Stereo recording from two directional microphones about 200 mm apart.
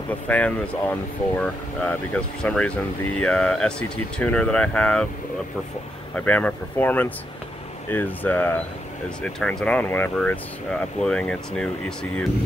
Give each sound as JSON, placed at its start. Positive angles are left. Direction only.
{"t": 0.3, "sound": "speech", "side_deg": 10}
{"t": 6.1, "sound": "speech", "side_deg": 5}